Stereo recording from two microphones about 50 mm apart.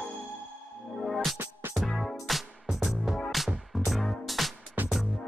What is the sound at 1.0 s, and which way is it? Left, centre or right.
Music, centre.